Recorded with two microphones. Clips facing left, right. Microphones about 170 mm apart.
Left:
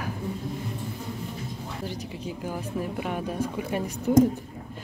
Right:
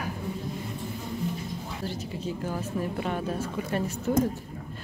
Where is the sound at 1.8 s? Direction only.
15° left (ahead or behind).